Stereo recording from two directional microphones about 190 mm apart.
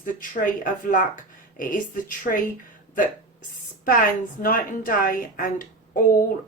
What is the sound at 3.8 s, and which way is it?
Speech, 50° left (ahead or behind).